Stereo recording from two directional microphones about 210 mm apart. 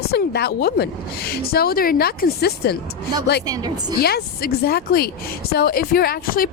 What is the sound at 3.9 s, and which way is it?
Speech, 50° left (ahead or behind).